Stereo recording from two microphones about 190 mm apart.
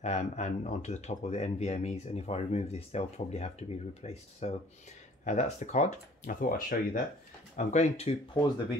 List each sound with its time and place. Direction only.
0.0 s speech: 35° left (ahead or behind)